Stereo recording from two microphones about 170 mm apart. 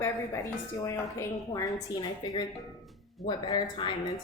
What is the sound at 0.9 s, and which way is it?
A woman's voice, 15° left (ahead or behind).